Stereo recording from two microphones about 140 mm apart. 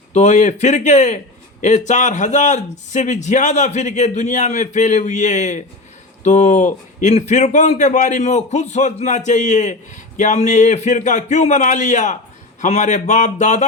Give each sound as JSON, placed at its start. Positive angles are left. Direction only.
{"t": 0.1, "sound": "a man's voice", "side_deg": 60}